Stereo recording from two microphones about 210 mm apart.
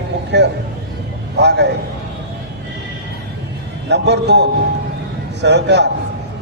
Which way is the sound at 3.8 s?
55° right (ahead or behind).